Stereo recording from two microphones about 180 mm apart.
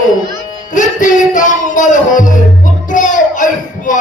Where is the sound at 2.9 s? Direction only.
45° left (ahead or behind).